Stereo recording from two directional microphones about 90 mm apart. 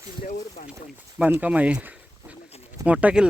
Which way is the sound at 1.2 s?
15° right (ahead or behind).